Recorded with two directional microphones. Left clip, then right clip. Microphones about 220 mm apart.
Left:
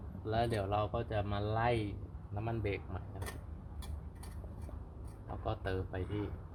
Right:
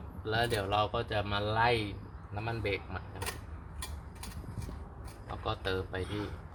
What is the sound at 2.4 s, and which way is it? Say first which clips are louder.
Speech: right 4 dB; 20° left (ahead or behind).